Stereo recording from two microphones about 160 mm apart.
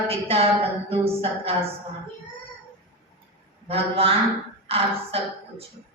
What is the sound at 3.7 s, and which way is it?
A woman's voice, 40° right (ahead or behind).